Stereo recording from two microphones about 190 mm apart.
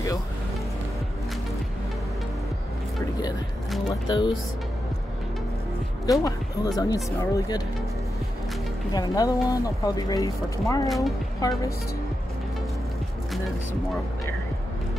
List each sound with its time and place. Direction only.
3.9 s speech: 20° left (ahead or behind)
6.0 s speech: 20° left (ahead or behind)
8.9 s speech: 20° left (ahead or behind)